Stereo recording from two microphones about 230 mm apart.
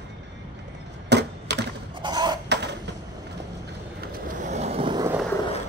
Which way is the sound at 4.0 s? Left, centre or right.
Right.